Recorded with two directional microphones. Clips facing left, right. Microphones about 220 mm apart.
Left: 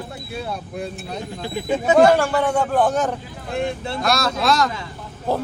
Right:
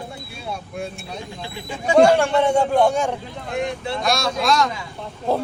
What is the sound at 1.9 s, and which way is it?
Speech, 5° left (ahead or behind).